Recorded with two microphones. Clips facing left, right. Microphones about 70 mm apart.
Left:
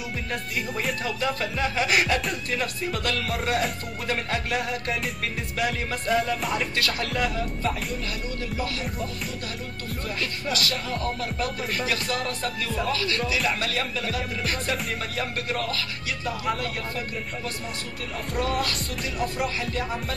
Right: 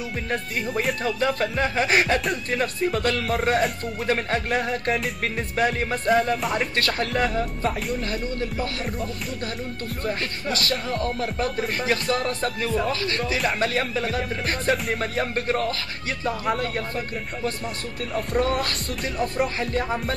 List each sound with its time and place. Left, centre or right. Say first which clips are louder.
0.3 s speech: right 4 dB; right
6.3 s music: right 3 dB; centre
6.6 s speech: right 3 dB; right
10.0 s speech: right 3 dB; right
18.4 s speech: left 1 dB; right